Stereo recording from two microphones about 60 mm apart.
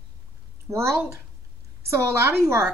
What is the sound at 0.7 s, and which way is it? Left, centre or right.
A woman's voice, right.